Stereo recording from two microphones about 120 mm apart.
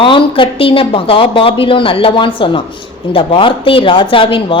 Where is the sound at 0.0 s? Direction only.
45° left (ahead or behind).